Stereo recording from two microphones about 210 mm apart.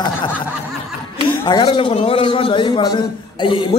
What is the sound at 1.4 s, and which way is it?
A man's voice, 20° left (ahead or behind).